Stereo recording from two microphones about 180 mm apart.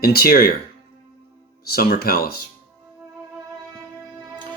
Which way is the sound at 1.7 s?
55° left (ahead or behind).